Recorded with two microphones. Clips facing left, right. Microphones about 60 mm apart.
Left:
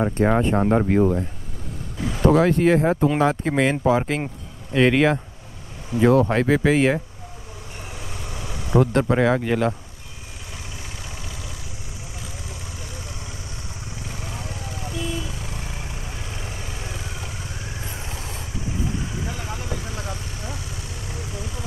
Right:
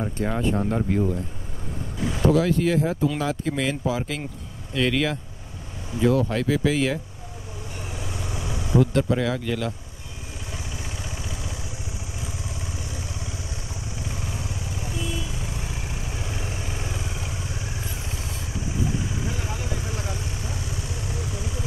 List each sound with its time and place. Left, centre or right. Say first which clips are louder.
0.0 s speech: left 6 dB; left
2.0 s speech: left 3 dB; left
8.5 s speech: left 2 dB; left
14.3 s vehicle: even; left
16.2 s vehicle: right 2 dB; centre
16.5 s vehicle: right 2 dB; right
19.2 s vehicle: even; left